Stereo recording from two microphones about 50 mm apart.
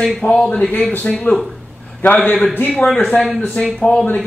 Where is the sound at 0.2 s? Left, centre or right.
Centre.